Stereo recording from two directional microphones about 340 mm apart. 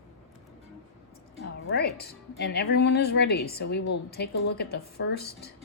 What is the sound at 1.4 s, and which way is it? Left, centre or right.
A woman's voice, left.